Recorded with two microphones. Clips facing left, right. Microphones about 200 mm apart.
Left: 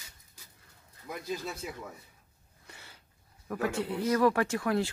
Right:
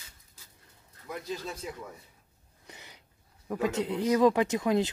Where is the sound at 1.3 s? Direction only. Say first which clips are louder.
Even; 10° left (ahead or behind).